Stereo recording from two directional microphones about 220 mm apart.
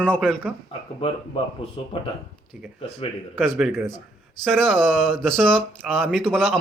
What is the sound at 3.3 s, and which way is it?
Speech, centre (ahead or behind).